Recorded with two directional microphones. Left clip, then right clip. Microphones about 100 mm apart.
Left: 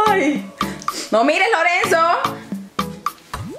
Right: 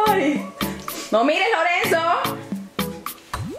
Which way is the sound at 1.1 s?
35° left (ahead or behind).